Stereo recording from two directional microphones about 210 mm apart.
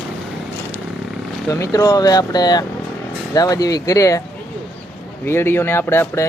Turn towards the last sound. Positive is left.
turn(degrees=10)  # may be behind; listen again after turning